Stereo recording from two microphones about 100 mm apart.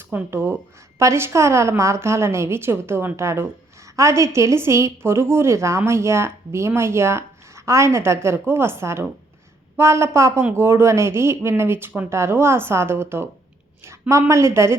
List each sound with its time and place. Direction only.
0.1 s a woman's voice: 20° right (ahead or behind)